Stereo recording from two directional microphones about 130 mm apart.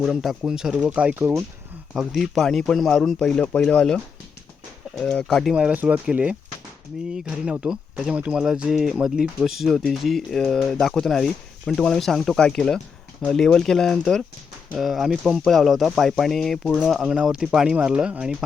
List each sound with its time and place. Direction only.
0.0 s speech: centre (ahead or behind); by 1.5 s 20° right (ahead or behind)
1.9 s speech: centre (ahead or behind)
5.5 s speech: 10° right (ahead or behind)